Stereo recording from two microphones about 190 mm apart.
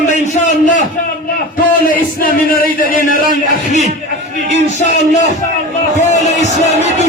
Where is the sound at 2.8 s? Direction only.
45° left (ahead or behind).